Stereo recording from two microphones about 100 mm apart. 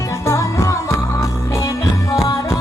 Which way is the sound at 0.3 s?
30° left (ahead or behind).